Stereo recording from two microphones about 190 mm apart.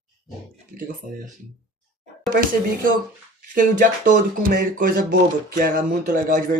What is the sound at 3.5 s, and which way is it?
Speech, 45° right (ahead or behind).